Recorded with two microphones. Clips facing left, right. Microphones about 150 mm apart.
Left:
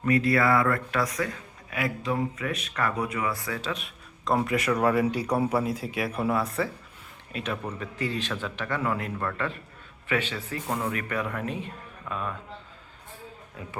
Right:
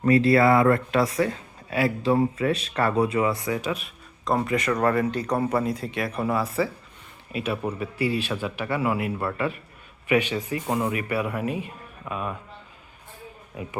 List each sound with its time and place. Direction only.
0.0 s a man's voice: 30° right (ahead or behind); by 3.8 s 15° right (ahead or behind)
3.8 s a man's voice: centre (ahead or behind)
13.6 s a man's voice: 15° right (ahead or behind)